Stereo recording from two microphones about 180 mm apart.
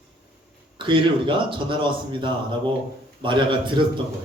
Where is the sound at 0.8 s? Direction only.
25° right (ahead or behind).